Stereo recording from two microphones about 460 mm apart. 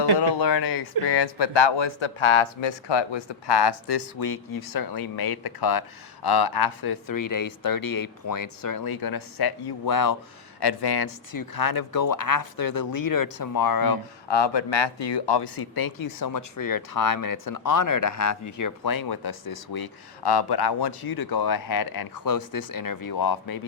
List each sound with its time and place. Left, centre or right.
0.2 s speech: left
14.3 s speech: left
18.8 s speech: left
20.2 s speech: left